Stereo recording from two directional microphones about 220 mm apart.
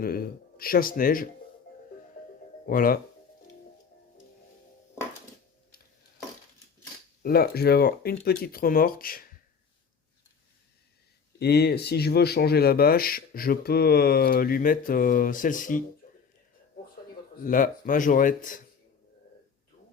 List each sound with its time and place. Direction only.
0.0 s speech: 40° left (ahead or behind)
2.6 s speech: 40° left (ahead or behind)
7.2 s speech: 45° left (ahead or behind)
11.3 s speech: 45° left (ahead or behind)
16.0 s whispering: 35° left (ahead or behind)
17.4 s speech: 40° left (ahead or behind)